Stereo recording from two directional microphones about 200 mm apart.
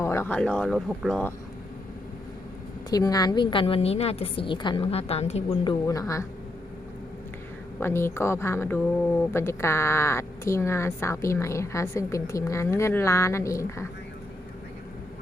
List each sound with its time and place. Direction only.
0.0 s speech: 15° left (ahead or behind)
2.9 s a woman's voice: 20° left (ahead or behind)
5.8 s a woman's voice: 15° left (ahead or behind)
7.8 s a woman's voice: 10° left (ahead or behind)